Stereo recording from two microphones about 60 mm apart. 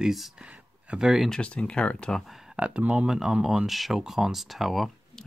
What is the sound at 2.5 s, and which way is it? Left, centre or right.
Speech, right.